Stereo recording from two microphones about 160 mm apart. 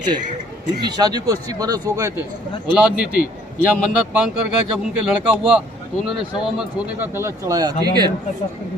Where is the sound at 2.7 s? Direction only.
10° right (ahead or behind).